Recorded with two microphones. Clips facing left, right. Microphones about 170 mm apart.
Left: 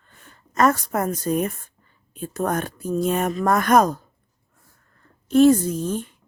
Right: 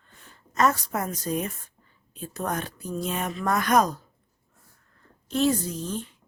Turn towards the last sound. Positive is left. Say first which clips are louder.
# left 7 dB
turn(degrees=50)  # may be behind; listen again after turning